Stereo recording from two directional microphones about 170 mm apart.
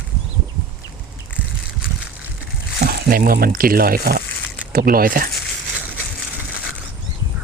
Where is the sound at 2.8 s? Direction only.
60° right (ahead or behind).